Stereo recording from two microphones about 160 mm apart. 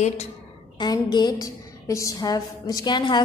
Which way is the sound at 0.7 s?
25° left (ahead or behind).